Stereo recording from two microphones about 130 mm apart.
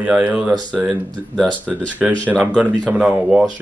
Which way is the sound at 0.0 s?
10° right (ahead or behind).